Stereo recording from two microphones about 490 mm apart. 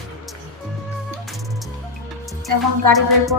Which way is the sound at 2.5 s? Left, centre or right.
Right.